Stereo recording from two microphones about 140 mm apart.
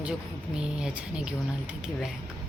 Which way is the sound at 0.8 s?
5° right (ahead or behind).